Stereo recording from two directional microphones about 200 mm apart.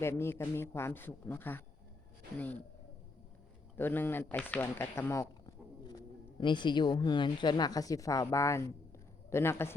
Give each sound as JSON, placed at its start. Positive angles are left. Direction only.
{"t": 0.0, "sound": "a man's voice", "side_deg": 10}
{"t": 3.8, "sound": "a man's voice", "side_deg": 10}